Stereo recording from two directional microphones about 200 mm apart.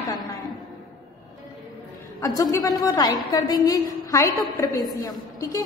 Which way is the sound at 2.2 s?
15° left (ahead or behind).